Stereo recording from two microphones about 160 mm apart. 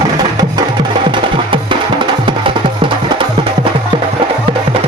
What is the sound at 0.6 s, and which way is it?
Percussion, 30° right (ahead or behind).